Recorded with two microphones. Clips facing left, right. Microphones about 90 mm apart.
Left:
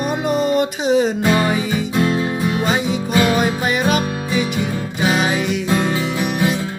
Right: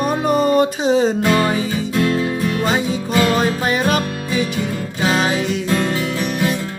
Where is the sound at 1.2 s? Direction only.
15° left (ahead or behind).